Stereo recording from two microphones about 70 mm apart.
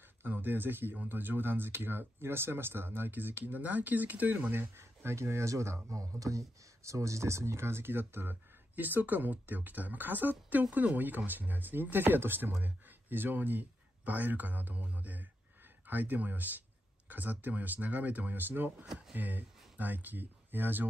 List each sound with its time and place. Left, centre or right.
0.2 s speech: right